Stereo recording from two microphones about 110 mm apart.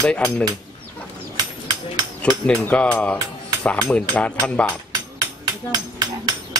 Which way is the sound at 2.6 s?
10° left (ahead or behind).